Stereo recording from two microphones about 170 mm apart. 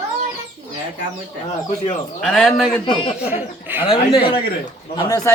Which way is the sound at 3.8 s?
30° left (ahead or behind).